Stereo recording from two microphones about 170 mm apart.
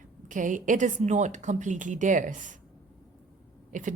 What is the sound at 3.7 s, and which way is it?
Speech, 50° right (ahead or behind).